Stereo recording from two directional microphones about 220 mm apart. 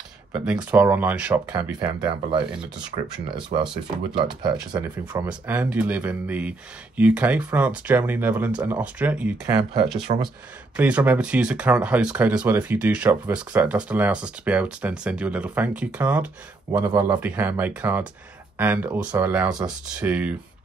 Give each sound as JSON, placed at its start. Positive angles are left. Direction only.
{"t": 0.3, "sound": "speech", "side_deg": -5}
{"t": 1.5, "sound": "speech", "side_deg": -20}
{"t": 10.0, "sound": "speech", "side_deg": -20}
{"t": 10.8, "sound": "speech", "side_deg": -5}
{"t": 16.7, "sound": "speech", "side_deg": -20}